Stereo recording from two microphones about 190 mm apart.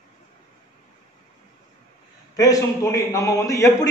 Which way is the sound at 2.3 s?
20° left (ahead or behind).